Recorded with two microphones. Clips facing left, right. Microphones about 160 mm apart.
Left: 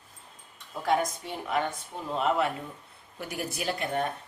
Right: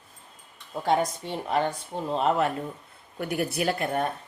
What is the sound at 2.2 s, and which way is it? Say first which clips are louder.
Speech: right 2 dB; 45° right (ahead or behind).